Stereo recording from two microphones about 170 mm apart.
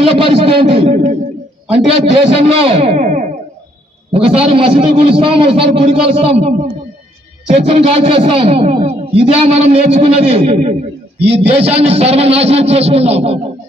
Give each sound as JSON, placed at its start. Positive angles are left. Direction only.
{"t": 0.0, "sound": "a man's voice", "side_deg": -35}
{"t": 4.1, "sound": "a man's voice", "side_deg": -35}